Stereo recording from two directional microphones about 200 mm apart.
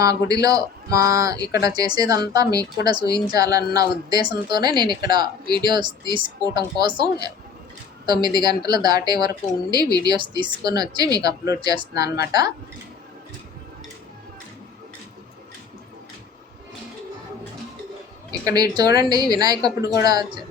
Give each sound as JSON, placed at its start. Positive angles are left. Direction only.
{"t": 0.0, "sound": "speech", "side_deg": -15}
{"t": 18.3, "sound": "speech", "side_deg": -20}